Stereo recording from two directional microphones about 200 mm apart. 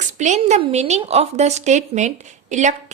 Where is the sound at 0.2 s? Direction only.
35° right (ahead or behind).